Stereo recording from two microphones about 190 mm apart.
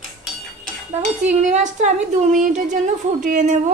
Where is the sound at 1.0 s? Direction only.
40° right (ahead or behind).